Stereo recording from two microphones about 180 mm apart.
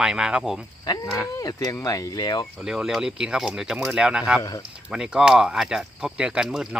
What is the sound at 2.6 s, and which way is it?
Speech, 5° right (ahead or behind).